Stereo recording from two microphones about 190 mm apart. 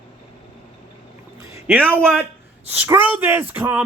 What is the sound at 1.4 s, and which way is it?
Boat, 15° right (ahead or behind).